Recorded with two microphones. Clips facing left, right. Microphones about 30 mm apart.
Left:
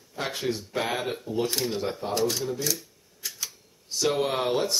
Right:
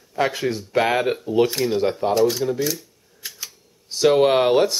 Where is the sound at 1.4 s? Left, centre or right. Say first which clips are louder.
Right 7 dB; centre.